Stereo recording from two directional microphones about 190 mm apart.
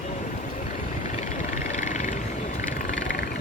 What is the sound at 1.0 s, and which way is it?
Vehicle, 40° left (ahead or behind).